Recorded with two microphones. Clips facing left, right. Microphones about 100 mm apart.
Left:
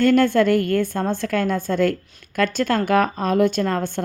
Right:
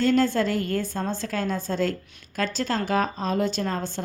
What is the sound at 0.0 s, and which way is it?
Speech, 60° left (ahead or behind).